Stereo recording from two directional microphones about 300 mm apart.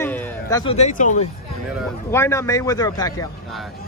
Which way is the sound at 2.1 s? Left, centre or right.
Centre.